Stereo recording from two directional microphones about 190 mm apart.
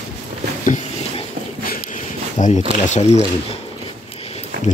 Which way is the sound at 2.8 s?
40° left (ahead or behind).